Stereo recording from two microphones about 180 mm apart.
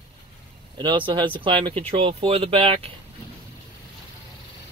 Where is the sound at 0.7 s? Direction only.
25° right (ahead or behind).